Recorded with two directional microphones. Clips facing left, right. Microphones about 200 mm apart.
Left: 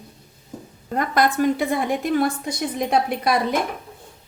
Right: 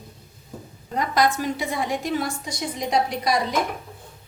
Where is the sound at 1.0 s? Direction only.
55° left (ahead or behind).